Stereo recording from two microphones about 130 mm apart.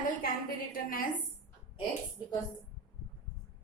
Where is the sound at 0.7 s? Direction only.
90° left.